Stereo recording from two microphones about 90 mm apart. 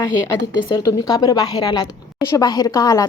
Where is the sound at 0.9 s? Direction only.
45° left (ahead or behind).